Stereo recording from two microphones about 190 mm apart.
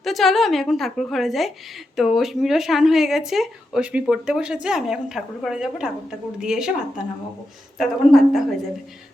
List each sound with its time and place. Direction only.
0.0 s a woman's voice: centre (ahead or behind)